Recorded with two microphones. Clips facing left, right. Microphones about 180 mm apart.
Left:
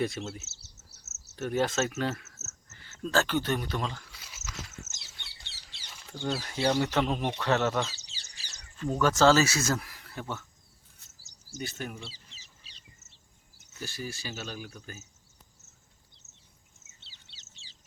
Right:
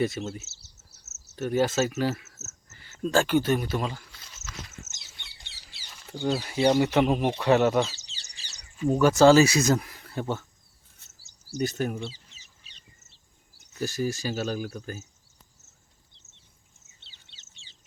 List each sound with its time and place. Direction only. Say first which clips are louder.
0.0 s speech: right 4 dB; centre (ahead or behind)
4.1 s a sound: even; 5° left (ahead or behind)
4.9 s a sound: even; 15° right (ahead or behind)
5.6 s speech: right 2 dB; 5° right (ahead or behind); by 10.4 s 30° right (ahead or behind)
11.2 s a sound: left 1 dB; 40° left (ahead or behind)
11.6 s speech: right 10 dB; 40° right (ahead or behind)
12.1 s bird: even; 30° left (ahead or behind)
13.7 s speech: right 10 dB; 45° right (ahead or behind)
17.0 s bird: even; 40° left (ahead or behind)